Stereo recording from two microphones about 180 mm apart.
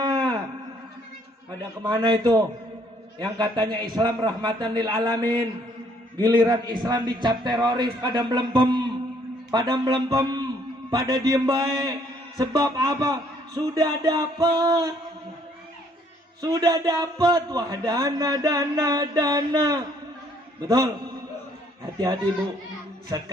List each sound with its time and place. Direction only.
0.0 s a sound: 25° right (ahead or behind)
1.5 s a man's voice: 25° right (ahead or behind)
16.4 s a man's voice: 20° right (ahead or behind)
21.9 s a man's voice: 20° right (ahead or behind)